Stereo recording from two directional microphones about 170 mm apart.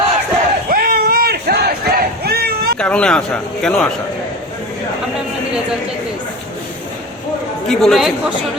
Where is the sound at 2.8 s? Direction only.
5° left (ahead or behind).